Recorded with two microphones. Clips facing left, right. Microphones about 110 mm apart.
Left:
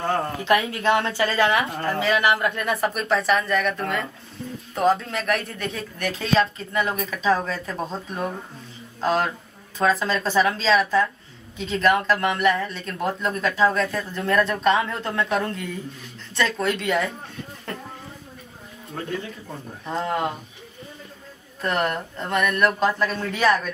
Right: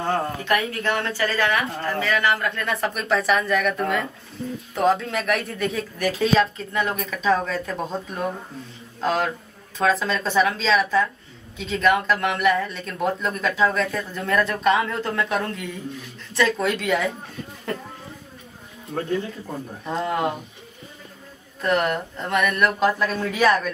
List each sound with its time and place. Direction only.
0.4 s speech: 20° left (ahead or behind); by 17.1 s centre (ahead or behind)
19.8 s speech: 5° right (ahead or behind)
21.5 s speech: centre (ahead or behind)